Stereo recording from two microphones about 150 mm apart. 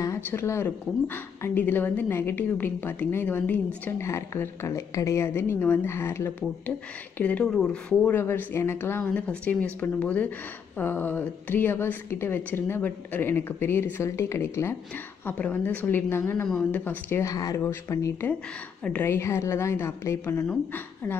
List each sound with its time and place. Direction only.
0.0 s speech: 15° left (ahead or behind)